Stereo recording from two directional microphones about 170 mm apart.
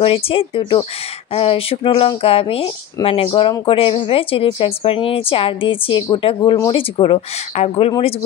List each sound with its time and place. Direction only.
0.0 s speech: 35° left (ahead or behind)